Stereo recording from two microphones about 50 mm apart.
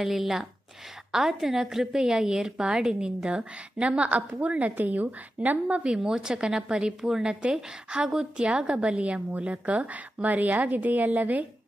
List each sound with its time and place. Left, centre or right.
0.0 s a woman's voice: centre; by 5.8 s right
5.9 s a woman's voice: centre; by 11.4 s right